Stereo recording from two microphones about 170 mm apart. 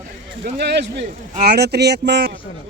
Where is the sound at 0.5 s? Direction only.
80° right.